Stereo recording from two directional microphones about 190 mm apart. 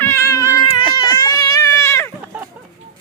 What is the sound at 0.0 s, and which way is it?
Cat, 15° left (ahead or behind).